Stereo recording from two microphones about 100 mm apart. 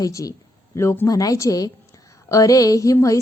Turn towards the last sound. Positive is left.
turn(degrees=35)  # may be behind; listen again after turning